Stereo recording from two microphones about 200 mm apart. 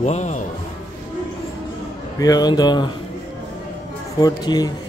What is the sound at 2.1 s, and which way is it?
Speech, 20° left (ahead or behind).